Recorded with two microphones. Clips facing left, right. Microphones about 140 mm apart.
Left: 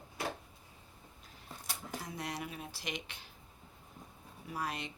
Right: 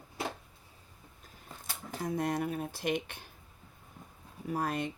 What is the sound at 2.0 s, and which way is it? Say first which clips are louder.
Speech: right 12 dB; 50° right (ahead or behind).